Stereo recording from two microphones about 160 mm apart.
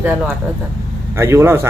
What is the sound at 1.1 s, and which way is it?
Speech, 15° right (ahead or behind).